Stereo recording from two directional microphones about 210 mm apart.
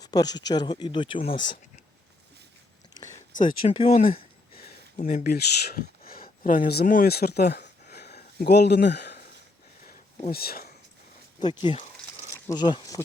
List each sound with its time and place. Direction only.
0.0 s speech: 20° left (ahead or behind)
3.4 s speech: 25° left (ahead or behind)
4.2 s a sound: 45° left (ahead or behind)
6.1 s speech: 45° left (ahead or behind)
7.9 s a sound: 50° left (ahead or behind)
10.3 s speech: 45° left (ahead or behind)
11.3 s speech: 20° left (ahead or behind)